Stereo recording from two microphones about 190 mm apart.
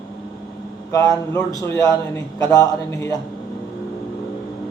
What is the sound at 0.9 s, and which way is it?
A man's voice, 15° left (ahead or behind).